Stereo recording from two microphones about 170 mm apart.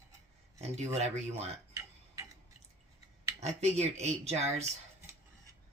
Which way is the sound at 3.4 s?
40° right (ahead or behind).